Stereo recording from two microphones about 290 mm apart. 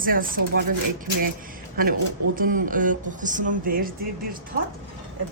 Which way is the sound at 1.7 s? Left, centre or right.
Right.